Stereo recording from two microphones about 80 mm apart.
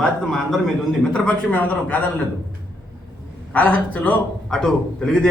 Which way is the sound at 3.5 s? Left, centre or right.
Left.